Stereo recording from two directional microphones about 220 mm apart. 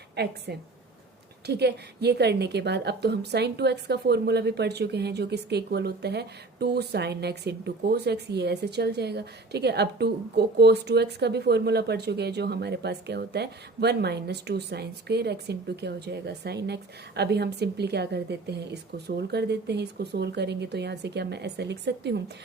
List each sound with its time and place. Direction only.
0.2 s a woman's voice: 50° right (ahead or behind)
1.5 s a woman's voice: 50° right (ahead or behind)